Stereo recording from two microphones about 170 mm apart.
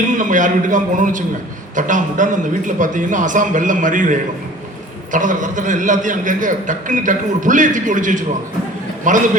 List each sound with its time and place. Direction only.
0.2 s a man's voice: 50° right (ahead or behind)